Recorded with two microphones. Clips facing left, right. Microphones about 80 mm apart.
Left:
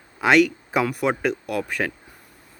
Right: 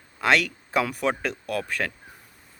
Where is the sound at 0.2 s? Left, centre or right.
Centre.